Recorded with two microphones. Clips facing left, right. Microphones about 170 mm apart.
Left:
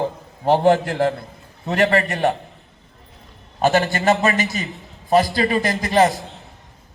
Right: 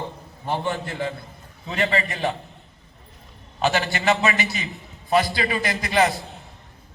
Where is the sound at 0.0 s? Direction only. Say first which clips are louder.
Left 10 dB; 90° left; by 2.3 s 65° left (ahead or behind).